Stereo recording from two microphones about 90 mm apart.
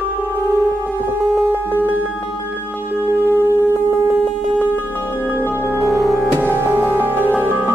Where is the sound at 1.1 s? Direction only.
25° right (ahead or behind).